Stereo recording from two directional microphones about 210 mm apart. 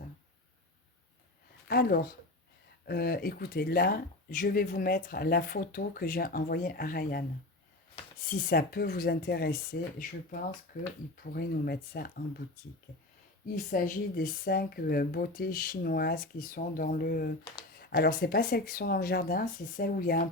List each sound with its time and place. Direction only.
1.6 s speech: 50° left (ahead or behind)
8.3 s speech: 45° left (ahead or behind)
13.7 s speech: 40° left (ahead or behind)
17.4 s speech: 20° left (ahead or behind)
17.7 s speech: 45° left (ahead or behind)